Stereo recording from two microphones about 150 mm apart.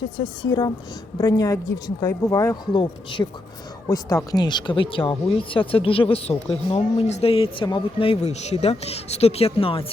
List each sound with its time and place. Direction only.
0.2 s speech: 30° left (ahead or behind)
2.7 s speech: 30° left (ahead or behind)